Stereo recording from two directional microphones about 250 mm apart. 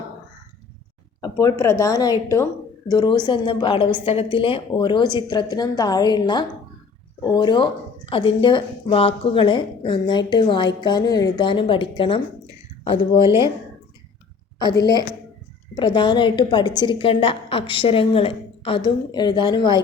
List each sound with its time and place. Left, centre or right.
1.2 s a woman's voice: centre
13.2 s speech: centre
15.7 s a woman's voice: centre